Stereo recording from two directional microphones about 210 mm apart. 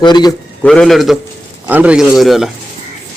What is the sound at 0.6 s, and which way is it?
Speech, centre (ahead or behind).